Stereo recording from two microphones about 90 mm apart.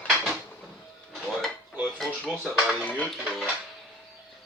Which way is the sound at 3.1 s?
Centre (ahead or behind).